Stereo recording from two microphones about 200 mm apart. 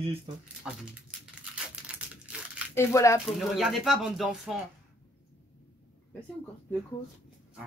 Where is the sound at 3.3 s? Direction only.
Centre (ahead or behind).